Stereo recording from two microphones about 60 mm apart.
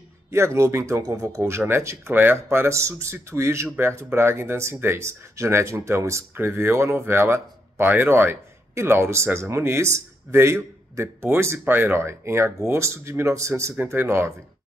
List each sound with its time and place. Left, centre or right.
0.3 s speech: right
1.0 s speech: right
1.4 s speech: right
6.3 s speech: right